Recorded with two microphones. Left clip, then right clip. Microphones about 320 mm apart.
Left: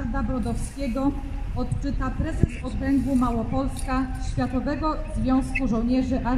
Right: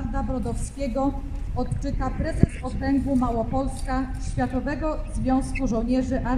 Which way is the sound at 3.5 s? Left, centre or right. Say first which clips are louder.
Even; centre.